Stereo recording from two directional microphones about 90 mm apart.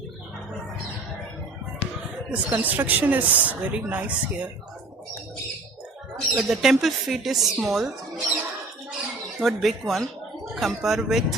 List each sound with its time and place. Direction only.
2.3 s speech: 15° right (ahead or behind)
6.1 s speech: 5° right (ahead or behind)
9.2 s speech: centre (ahead or behind)